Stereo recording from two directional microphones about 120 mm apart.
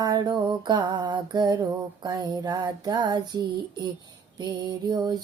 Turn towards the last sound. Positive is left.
turn(degrees=-35)  # may be behind; listen again after turning